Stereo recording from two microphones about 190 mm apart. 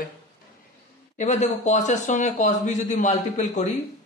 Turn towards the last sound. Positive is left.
turn(degrees=40)  # may be behind; listen again after turning